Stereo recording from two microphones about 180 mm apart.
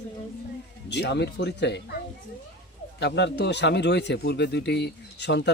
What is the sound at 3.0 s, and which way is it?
Speech, 70° left (ahead or behind).